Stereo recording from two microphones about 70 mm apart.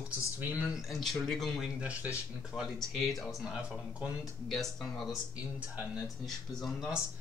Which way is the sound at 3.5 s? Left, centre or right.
Centre.